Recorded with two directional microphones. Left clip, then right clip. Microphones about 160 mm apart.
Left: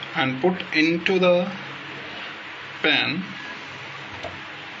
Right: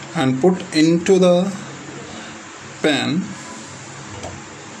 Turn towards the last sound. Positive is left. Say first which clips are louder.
# right 2 dB
turn(degrees=-55)  # may be behind; listen again after turning